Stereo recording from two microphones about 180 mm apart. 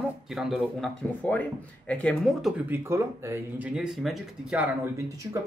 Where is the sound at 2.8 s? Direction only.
15° right (ahead or behind).